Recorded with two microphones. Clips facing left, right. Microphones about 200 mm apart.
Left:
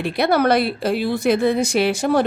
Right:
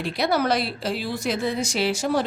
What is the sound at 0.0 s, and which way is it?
Speech, 60° left (ahead or behind).